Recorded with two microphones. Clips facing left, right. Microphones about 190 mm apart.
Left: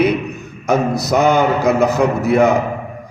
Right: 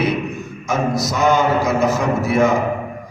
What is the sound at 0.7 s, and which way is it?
A man's voice, 60° left (ahead or behind).